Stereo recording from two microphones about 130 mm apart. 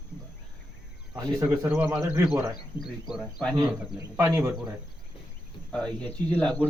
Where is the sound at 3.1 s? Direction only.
5° right (ahead or behind).